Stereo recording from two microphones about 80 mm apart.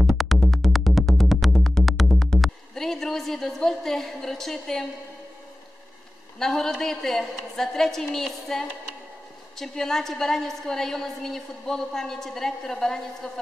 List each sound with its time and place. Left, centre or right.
0.0 s music: centre
6.4 s a woman's voice: centre